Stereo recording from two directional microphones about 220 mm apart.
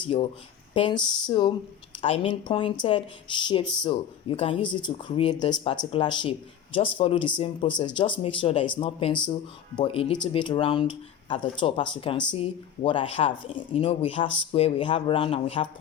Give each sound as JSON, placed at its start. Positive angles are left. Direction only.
{"t": 0.0, "sound": "speech", "side_deg": 25}